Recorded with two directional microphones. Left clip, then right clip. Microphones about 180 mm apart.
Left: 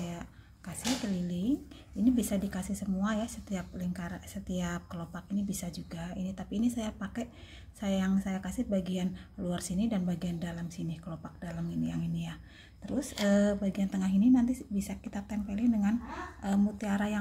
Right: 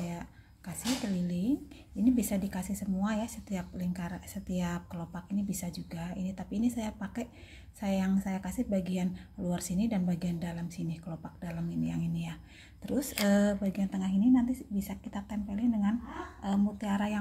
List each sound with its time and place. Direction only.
0.0 s a sound: 5° right (ahead or behind)
2.0 s speech: 5° right (ahead or behind)
12.8 s speech: 20° right (ahead or behind)
13.4 s speech: 10° right (ahead or behind)
13.7 s a woman's voice: 5° left (ahead or behind)